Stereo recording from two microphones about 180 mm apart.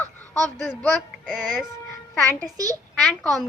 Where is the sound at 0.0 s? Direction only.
5° left (ahead or behind).